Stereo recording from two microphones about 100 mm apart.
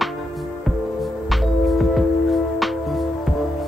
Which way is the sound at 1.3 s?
Centre (ahead or behind).